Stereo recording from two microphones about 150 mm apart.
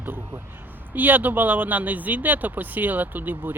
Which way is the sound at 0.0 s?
15° right (ahead or behind).